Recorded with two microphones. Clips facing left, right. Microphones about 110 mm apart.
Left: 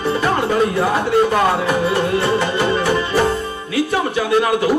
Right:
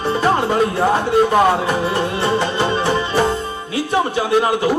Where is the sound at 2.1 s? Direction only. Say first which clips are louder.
Left 1 dB; 25° right (ahead or behind).